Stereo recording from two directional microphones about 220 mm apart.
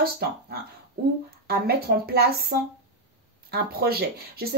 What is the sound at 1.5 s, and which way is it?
Speech, 45° right (ahead or behind).